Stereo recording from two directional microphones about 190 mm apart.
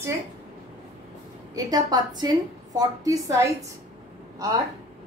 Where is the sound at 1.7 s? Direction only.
20° right (ahead or behind).